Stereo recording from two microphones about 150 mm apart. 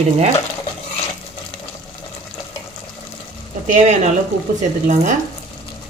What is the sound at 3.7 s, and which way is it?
Speech, 50° right (ahead or behind).